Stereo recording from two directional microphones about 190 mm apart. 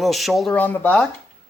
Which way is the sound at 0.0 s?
Centre (ahead or behind).